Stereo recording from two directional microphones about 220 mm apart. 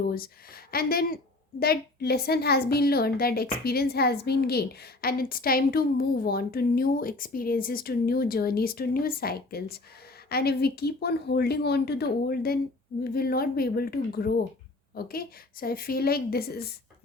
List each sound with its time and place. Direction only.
0.1 s a woman's voice: 40° left (ahead or behind)